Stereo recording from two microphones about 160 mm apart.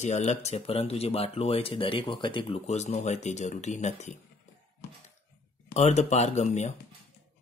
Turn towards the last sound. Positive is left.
turn(degrees=45)  # may be behind; listen again after turning